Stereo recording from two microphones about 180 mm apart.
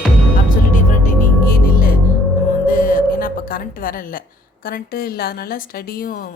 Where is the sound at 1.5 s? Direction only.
55° left (ahead or behind).